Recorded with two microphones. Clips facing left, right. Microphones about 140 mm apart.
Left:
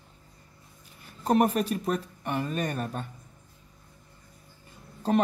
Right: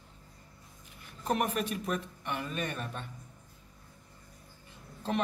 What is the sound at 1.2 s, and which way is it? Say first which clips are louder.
Speech: left 7 dB; 35° left (ahead or behind).